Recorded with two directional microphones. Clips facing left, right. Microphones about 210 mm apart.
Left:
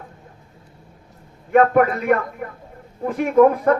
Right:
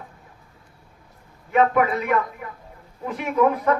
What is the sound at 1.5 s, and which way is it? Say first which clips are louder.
A man's voice: left 4 dB; 50° left (ahead or behind).